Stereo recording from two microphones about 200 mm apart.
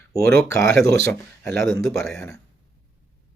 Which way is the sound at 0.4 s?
15° left (ahead or behind).